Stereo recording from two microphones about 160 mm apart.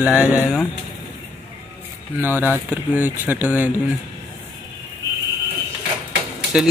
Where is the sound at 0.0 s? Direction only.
10° right (ahead or behind).